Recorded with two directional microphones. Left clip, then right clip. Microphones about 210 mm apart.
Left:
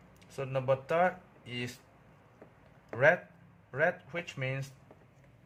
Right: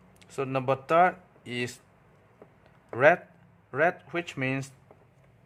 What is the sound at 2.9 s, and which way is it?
Speech, 30° right (ahead or behind).